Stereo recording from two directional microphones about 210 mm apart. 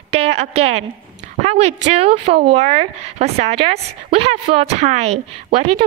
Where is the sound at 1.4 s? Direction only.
30° right (ahead or behind).